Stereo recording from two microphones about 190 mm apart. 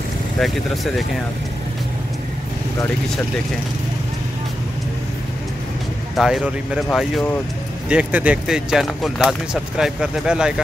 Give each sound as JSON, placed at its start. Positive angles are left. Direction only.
{"t": 6.1, "sound": "speech", "side_deg": -5}